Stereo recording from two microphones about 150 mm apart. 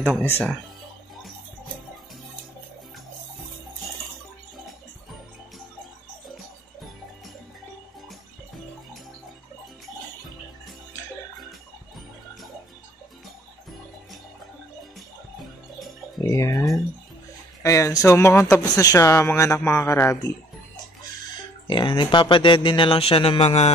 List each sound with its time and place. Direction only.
0.1 s speech: 15° right (ahead or behind)
16.3 s a sound: 20° left (ahead or behind)
17.6 s speech: 20° left (ahead or behind)
21.6 s speech: 30° left (ahead or behind)